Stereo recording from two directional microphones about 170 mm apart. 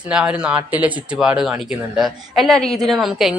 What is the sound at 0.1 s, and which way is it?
A woman's voice, 5° right (ahead or behind).